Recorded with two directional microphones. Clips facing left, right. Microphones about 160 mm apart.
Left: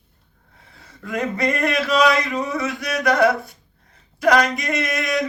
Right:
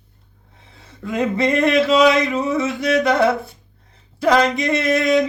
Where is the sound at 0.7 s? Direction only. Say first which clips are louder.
Right 4 dB; 25° right (ahead or behind).